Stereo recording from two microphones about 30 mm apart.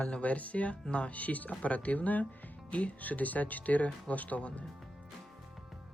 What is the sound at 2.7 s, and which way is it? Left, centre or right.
Speech, left.